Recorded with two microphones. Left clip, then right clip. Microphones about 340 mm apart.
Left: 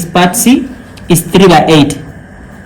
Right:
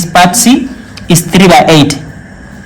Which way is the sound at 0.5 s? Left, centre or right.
Right.